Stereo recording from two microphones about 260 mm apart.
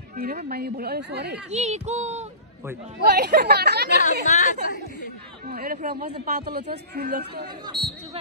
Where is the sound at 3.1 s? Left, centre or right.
Right.